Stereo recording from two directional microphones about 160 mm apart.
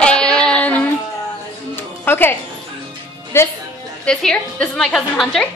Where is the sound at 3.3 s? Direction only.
15° left (ahead or behind).